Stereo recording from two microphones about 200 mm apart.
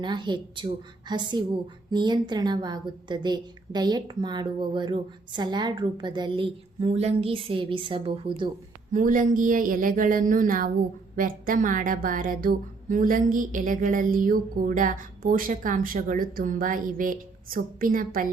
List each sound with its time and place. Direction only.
0.0 s a woman's voice: 20° right (ahead or behind)
8.9 s a woman's voice: 40° right (ahead or behind)